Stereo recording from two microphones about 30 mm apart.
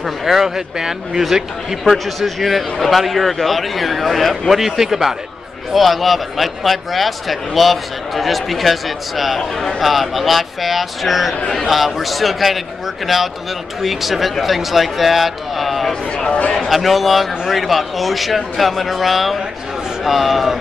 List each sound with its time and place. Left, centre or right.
0.0 s speech: centre
0.6 s speech: centre
2.0 s a man's voice: centre
4.6 s a man's voice: centre
15.9 s speech: left
16.6 s a man's voice: centre